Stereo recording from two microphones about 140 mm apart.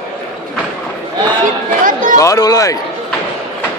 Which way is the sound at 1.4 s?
70° right (ahead or behind).